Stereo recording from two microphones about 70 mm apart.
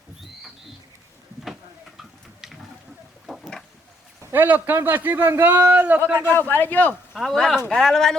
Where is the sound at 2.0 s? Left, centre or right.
Centre.